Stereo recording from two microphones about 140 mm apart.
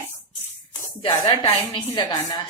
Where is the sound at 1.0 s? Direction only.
45° left (ahead or behind).